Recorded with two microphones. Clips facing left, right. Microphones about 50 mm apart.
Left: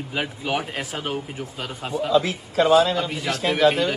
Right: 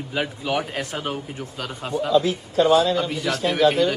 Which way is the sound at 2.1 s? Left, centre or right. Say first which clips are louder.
Right 1 dB; left.